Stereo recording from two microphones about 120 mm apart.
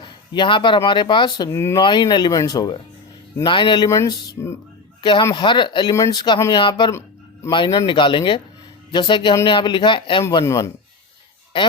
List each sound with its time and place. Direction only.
0.0 s a sound: 45° left (ahead or behind)
0.9 s speech: 40° left (ahead or behind)
1.5 s speech: 20° left (ahead or behind)
1.8 s speech: 40° left (ahead or behind)
3.8 s speech: 25° left (ahead or behind)
5.9 s speech: 30° left (ahead or behind)
10.4 s speech: 30° left (ahead or behind)
11.5 s speech: 40° left (ahead or behind)